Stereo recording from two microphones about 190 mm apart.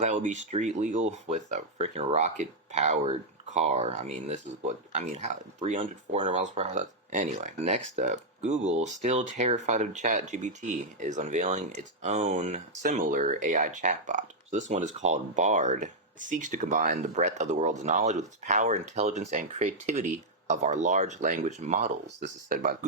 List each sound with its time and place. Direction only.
0.0 s speech: 40° right (ahead or behind)